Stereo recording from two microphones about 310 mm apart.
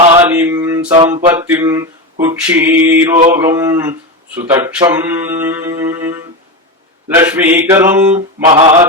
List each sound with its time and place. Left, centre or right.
0.2 s mantra: centre